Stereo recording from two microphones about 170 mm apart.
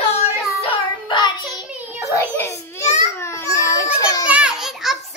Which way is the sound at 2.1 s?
15° left (ahead or behind).